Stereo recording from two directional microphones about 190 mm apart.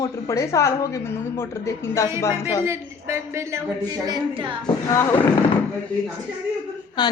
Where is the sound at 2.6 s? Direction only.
15° right (ahead or behind).